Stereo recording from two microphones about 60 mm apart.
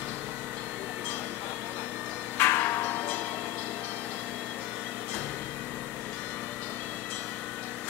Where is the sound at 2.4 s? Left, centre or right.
Left.